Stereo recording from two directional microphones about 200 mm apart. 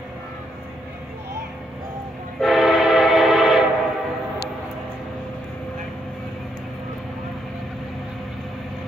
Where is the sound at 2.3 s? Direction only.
Centre (ahead or behind).